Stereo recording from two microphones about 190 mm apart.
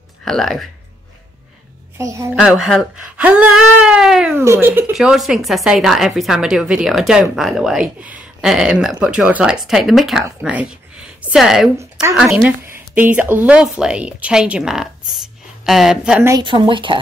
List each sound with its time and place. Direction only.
0.2 s speech: centre (ahead or behind)
2.0 s a woman's voice: 15° right (ahead or behind)
2.3 s speech: 5° right (ahead or behind)
4.4 s speech: 15° right (ahead or behind)
11.7 s a woman's voice: 15° right (ahead or behind)
12.2 s a woman's voice: centre (ahead or behind)
16.3 s speech: 25° right (ahead or behind)